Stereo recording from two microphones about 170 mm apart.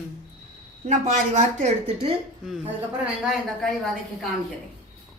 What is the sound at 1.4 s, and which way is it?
Speech, 40° right (ahead or behind).